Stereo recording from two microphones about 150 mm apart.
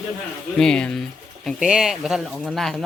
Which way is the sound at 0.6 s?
5° left (ahead or behind).